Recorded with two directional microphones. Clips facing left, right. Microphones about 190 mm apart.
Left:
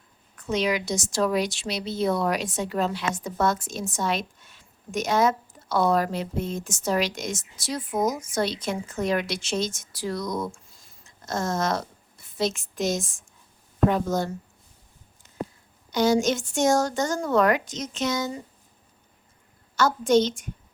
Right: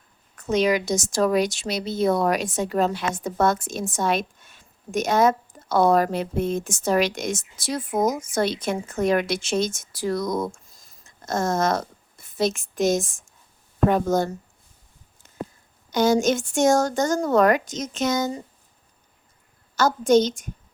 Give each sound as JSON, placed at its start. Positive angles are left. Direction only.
{"t": 0.3, "sound": "a woman's voice", "side_deg": -45}
{"t": 15.9, "sound": "a woman's voice", "side_deg": -50}
{"t": 19.7, "sound": "a woman's voice", "side_deg": -40}